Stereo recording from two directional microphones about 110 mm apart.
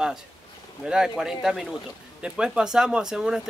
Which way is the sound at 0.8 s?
5° right (ahead or behind).